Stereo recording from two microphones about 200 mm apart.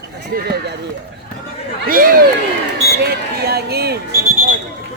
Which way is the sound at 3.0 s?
50° right (ahead or behind).